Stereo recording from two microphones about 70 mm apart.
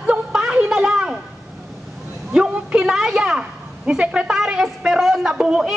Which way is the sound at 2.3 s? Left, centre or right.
Centre.